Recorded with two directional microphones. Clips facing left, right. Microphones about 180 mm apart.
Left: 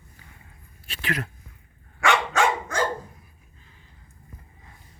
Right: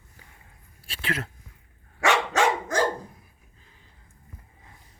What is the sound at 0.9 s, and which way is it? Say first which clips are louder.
Speech: left 1 dB; 30° right (ahead or behind).